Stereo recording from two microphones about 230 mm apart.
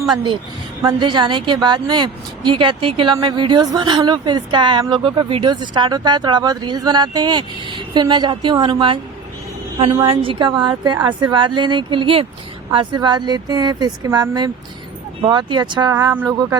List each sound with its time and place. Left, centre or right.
0.8 s a woman's voice: centre